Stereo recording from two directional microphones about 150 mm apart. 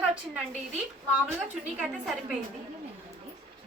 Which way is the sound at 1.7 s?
Centre (ahead or behind).